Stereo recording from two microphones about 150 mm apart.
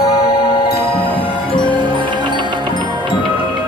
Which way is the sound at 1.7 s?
30° right (ahead or behind).